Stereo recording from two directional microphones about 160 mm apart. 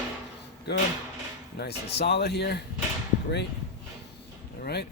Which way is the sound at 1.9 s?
90° left.